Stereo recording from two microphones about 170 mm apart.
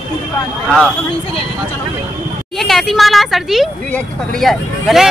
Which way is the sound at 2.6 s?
Centre (ahead or behind).